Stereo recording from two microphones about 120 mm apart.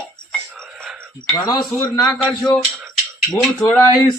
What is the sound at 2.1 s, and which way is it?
Speech, 5° left (ahead or behind).